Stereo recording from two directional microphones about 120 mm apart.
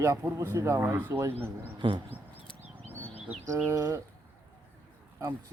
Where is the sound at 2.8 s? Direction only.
15° left (ahead or behind).